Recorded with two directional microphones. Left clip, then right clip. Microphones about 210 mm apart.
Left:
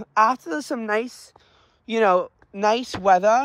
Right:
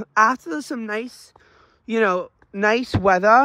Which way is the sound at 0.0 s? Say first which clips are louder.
Right 2 dB; 20° right (ahead or behind).